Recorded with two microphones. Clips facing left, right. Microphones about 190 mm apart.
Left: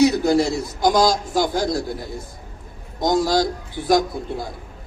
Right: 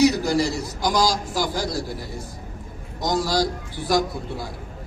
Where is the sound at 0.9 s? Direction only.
55° left (ahead or behind).